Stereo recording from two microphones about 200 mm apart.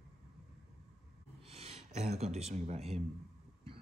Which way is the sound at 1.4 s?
30° right (ahead or behind).